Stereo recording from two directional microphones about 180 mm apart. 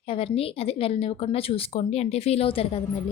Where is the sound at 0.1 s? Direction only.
30° left (ahead or behind).